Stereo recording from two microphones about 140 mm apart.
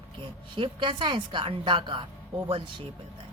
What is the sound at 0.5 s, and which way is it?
A woman's voice, 35° right (ahead or behind).